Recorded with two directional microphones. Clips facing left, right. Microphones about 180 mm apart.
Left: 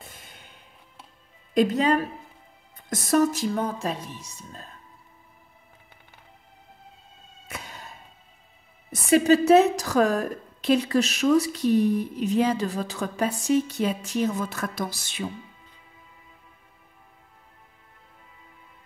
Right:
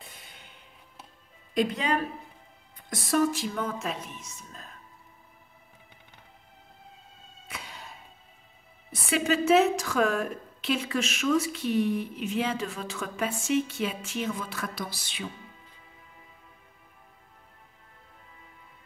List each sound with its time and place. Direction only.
0.0 s a sound: 50° left (ahead or behind)
1.5 s a woman's voice: 45° left (ahead or behind)
7.4 s music: 45° left (ahead or behind)
8.9 s a woman's voice: 45° left (ahead or behind)